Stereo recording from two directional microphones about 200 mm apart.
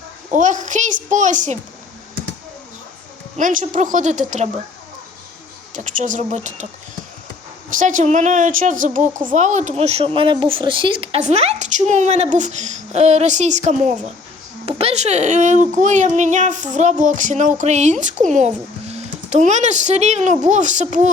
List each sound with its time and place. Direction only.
0.3 s speech: 40° right (ahead or behind)
3.3 s speech: 40° right (ahead or behind)
5.7 s speech: 40° right (ahead or behind)
7.7 s speech: 40° right (ahead or behind)